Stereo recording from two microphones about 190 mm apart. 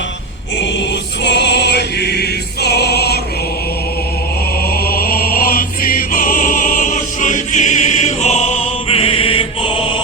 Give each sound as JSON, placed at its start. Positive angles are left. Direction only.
{"t": 1.2, "sound": "choir", "side_deg": 65}
{"t": 4.7, "sound": "music", "side_deg": 50}